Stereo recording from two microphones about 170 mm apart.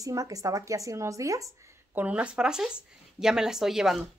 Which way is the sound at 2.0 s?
10° right (ahead or behind).